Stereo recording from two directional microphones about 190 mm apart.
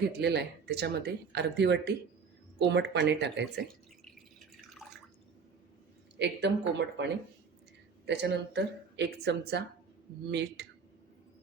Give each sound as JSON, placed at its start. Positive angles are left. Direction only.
{"t": 0.2, "sound": "speech", "side_deg": -60}
{"t": 4.0, "sound": "drip", "side_deg": 0}
{"t": 6.1, "sound": "speech", "side_deg": -65}